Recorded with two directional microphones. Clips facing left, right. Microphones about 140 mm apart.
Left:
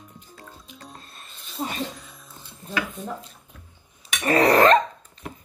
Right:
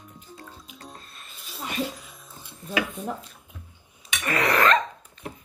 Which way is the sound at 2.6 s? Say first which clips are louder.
Right 1 dB; 25° left (ahead or behind).